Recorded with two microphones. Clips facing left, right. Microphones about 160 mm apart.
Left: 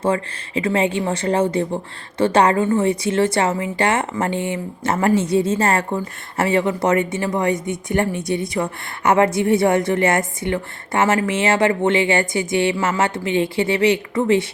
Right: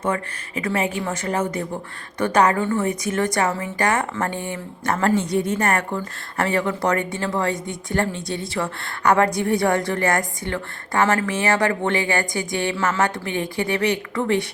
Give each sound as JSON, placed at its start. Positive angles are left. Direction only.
{"t": 0.0, "sound": "speech", "side_deg": 30}